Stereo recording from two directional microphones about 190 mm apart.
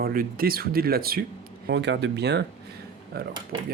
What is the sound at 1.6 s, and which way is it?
Speech, 65° right (ahead or behind).